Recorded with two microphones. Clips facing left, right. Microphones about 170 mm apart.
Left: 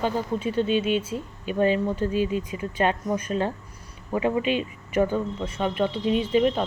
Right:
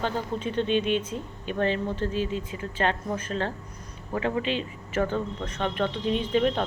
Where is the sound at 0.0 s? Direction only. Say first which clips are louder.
Left 3 dB; 10° left (ahead or behind).